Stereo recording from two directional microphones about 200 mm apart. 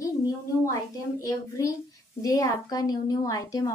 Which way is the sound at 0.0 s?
15° left (ahead or behind).